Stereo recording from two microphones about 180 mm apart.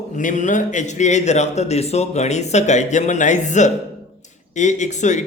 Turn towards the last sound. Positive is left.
turn(degrees=40)  # may be behind; listen again after turning